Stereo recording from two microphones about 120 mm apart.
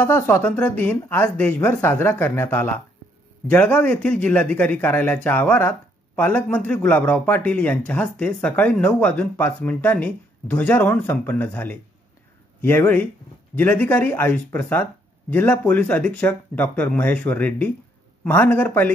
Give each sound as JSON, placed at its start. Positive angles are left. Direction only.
{"t": 0.0, "sound": "a man's voice", "side_deg": 15}